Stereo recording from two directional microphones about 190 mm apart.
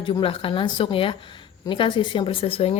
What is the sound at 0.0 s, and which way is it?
Speech, 25° left (ahead or behind).